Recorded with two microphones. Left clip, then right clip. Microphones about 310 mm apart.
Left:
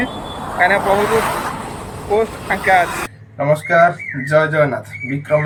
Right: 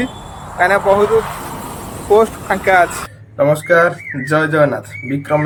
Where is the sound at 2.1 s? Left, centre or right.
Centre.